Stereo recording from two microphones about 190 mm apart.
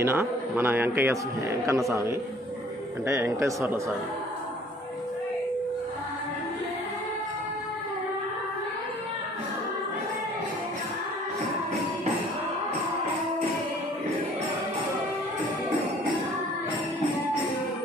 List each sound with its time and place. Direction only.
0.0 s a man's voice: 15° right (ahead or behind)